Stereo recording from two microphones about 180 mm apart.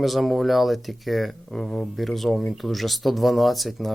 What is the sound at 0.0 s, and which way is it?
Speech, centre (ahead or behind).